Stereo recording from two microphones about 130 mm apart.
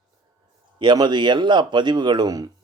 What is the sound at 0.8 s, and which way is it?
Speech, 35° right (ahead or behind).